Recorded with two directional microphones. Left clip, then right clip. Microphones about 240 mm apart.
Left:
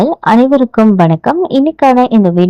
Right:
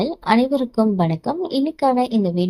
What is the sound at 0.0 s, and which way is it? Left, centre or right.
A woman's voice, left.